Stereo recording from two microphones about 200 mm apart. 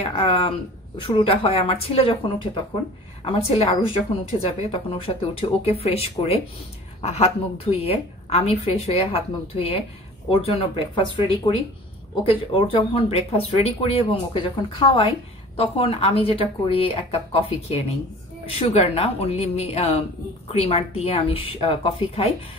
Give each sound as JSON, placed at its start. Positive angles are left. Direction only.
{"t": 0.0, "sound": "a woman's voice", "side_deg": 30}